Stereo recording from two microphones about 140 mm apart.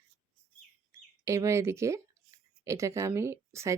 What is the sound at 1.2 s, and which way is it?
A woman's voice, 20° right (ahead or behind).